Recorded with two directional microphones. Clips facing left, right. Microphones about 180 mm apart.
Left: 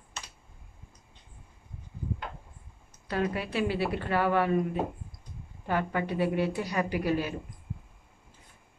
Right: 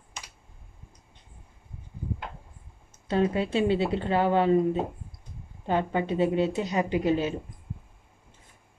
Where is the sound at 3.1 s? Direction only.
25° right (ahead or behind).